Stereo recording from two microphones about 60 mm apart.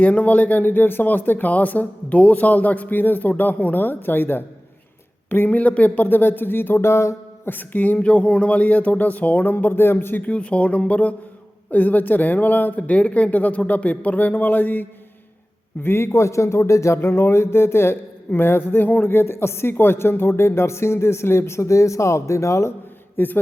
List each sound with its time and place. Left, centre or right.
0.0 s speech: left
5.5 s speech: left
7.5 s speech: left
10.2 s speech: left
23.1 s speech: left